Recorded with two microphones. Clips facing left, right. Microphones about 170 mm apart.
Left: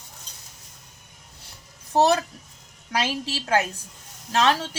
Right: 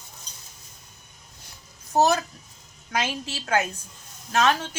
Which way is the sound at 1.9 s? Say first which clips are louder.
Left 1 dB; 30° left (ahead or behind).